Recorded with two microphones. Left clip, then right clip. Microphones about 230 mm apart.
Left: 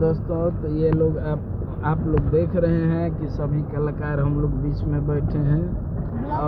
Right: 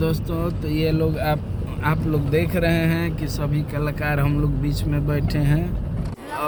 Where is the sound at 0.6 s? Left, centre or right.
Right.